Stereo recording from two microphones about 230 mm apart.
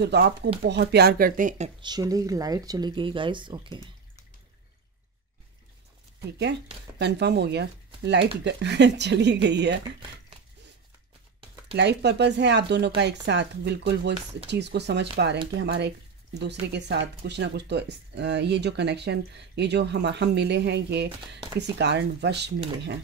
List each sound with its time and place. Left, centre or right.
0.0 s speech: right
1.8 s speech: centre
7.0 s speech: right
11.7 s speech: right